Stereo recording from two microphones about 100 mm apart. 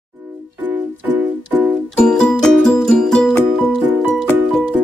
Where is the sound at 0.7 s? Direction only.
15° right (ahead or behind).